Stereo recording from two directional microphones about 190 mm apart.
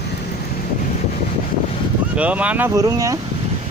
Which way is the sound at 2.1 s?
5° right (ahead or behind).